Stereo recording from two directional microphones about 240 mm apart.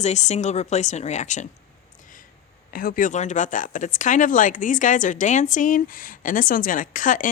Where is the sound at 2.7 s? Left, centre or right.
Left.